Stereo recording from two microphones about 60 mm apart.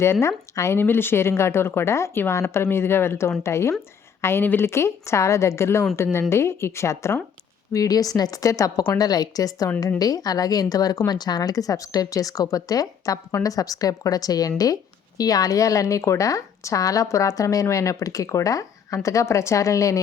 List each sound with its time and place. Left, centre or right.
0.0 s a woman's voice: left
0.8 s speech: left
7.7 s a woman's voice: left
19.0 s a woman's voice: left